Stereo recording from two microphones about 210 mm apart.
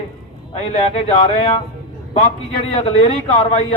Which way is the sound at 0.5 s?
30° left (ahead or behind).